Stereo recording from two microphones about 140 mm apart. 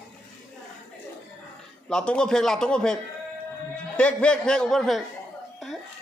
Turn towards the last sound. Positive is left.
turn(degrees=0)  # may be behind; listen again after turning